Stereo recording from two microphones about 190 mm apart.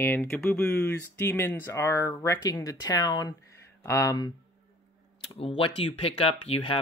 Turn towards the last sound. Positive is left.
turn(degrees=30)  # may be behind; listen again after turning